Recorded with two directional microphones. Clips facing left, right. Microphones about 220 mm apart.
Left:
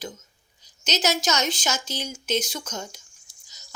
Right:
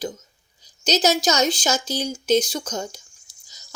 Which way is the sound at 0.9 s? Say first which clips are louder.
Right 5 dB; 35° right (ahead or behind).